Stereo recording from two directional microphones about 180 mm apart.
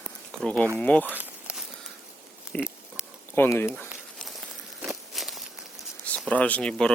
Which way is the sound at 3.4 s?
15° left (ahead or behind).